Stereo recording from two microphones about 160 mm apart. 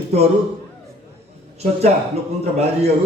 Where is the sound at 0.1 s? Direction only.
40° right (ahead or behind).